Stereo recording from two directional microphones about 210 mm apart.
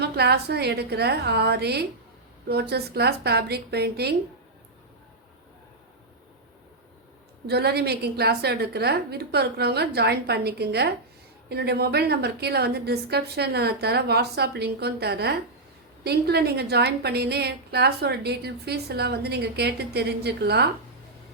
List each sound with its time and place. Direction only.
0.0 s a woman's voice: 50° right (ahead or behind)
7.4 s a woman's voice: 50° right (ahead or behind)